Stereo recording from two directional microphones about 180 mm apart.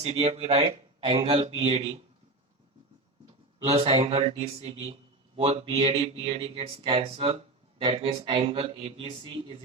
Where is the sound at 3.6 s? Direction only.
35° right (ahead or behind).